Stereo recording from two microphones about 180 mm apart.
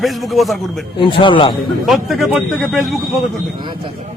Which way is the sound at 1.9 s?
Centre (ahead or behind).